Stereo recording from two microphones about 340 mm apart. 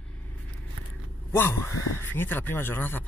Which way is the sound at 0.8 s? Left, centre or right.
Right.